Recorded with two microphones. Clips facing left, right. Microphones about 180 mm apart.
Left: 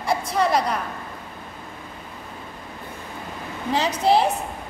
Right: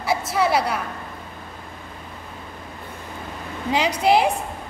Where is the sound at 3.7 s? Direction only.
10° right (ahead or behind).